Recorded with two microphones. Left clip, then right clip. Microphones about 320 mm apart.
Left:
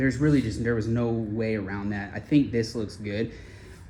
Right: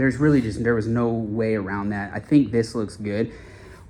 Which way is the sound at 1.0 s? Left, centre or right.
Right.